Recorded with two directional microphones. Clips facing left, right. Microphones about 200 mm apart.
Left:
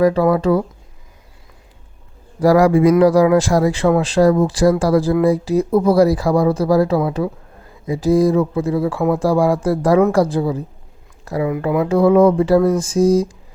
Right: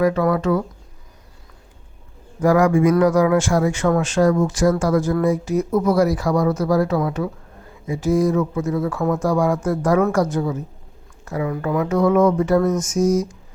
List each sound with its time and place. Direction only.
0.0 s speech: 35° left (ahead or behind)
2.4 s speech: 35° left (ahead or behind)